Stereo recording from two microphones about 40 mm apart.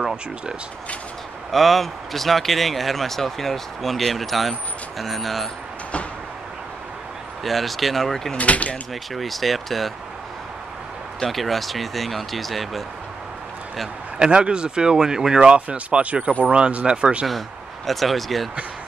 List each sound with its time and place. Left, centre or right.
0.0 s speech: centre
1.5 s speech: centre
7.4 s speech: centre
8.4 s speech: left
9.1 s speech: centre
11.1 s speech: centre
14.1 s speech: right
15.4 s speech: right
17.8 s speech: centre